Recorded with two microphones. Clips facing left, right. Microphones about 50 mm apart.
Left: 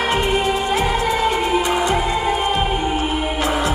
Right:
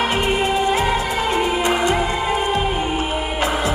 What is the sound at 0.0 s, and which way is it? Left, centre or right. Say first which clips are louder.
Music: left 1 dB; right.